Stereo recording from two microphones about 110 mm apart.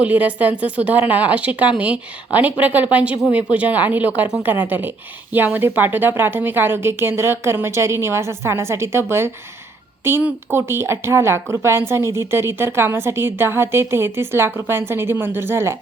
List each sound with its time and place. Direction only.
0.0 s speech: 15° right (ahead or behind)